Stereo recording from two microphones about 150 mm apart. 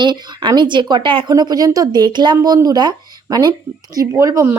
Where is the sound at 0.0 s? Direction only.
30° right (ahead or behind).